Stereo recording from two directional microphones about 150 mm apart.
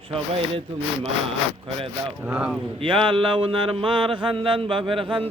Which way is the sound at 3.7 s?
35° right (ahead or behind).